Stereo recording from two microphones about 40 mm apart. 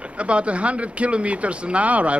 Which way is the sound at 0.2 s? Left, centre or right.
Right.